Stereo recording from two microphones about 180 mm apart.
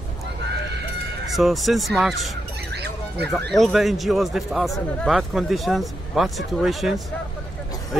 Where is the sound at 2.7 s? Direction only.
65° right (ahead or behind).